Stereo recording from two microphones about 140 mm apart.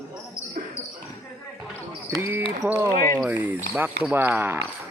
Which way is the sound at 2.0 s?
20° right (ahead or behind).